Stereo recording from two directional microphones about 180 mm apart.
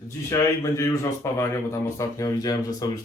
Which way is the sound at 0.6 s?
15° left (ahead or behind).